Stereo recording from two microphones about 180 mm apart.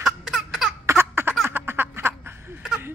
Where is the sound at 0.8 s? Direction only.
15° right (ahead or behind).